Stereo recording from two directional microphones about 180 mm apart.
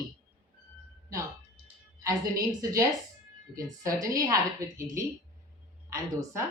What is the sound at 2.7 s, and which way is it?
A woman's voice, 20° right (ahead or behind).